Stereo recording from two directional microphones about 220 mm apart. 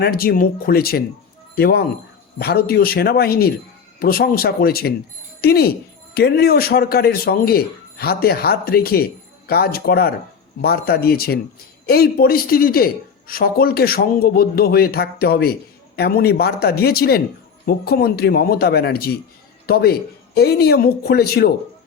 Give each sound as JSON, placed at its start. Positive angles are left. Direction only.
{"t": 0.0, "sound": "a woman's voice", "side_deg": 45}